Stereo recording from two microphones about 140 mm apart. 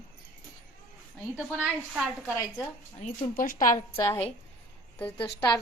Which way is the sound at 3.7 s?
40° left (ahead or behind).